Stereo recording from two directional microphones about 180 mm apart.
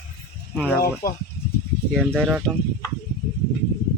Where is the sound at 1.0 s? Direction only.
55° left (ahead or behind).